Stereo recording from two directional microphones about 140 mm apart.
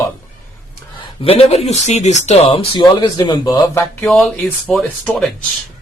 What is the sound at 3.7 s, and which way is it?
Speech, 15° left (ahead or behind).